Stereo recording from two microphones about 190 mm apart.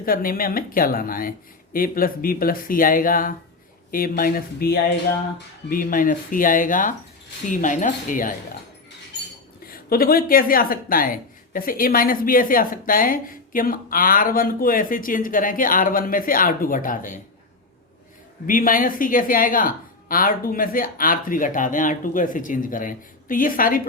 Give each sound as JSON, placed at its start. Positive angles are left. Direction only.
{"t": 0.0, "sound": "speech", "side_deg": 50}
{"t": 9.6, "sound": "speech", "side_deg": 50}
{"t": 18.4, "sound": "speech", "side_deg": 45}